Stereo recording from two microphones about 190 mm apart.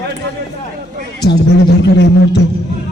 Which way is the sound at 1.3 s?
60° left (ahead or behind).